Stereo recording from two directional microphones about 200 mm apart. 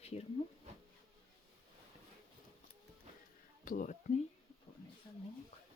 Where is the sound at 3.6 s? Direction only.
40° left (ahead or behind).